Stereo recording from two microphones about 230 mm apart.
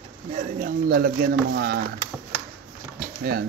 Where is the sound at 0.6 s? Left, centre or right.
Right.